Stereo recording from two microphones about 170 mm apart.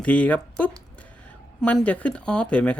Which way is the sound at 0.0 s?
10° left (ahead or behind).